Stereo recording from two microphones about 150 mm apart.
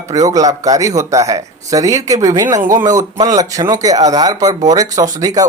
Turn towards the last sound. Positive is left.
turn(degrees=-25)  # may be behind; listen again after turning